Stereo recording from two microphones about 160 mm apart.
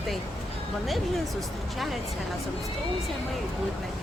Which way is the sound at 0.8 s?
Centre (ahead or behind).